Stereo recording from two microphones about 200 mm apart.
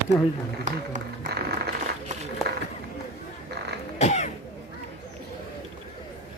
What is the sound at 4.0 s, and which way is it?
Cough, 35° left (ahead or behind).